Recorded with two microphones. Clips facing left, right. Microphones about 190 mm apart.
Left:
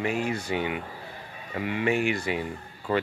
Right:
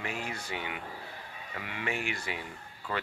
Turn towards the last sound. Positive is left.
turn(degrees=30)  # may be behind; listen again after turning